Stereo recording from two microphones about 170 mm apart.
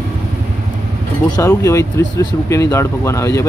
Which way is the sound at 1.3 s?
20° left (ahead or behind).